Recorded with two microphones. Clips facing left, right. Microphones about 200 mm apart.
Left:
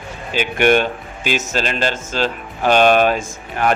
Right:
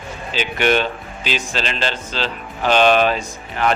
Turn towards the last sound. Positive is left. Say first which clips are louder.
# left 1 dB
turn(degrees=45)  # may be behind; listen again after turning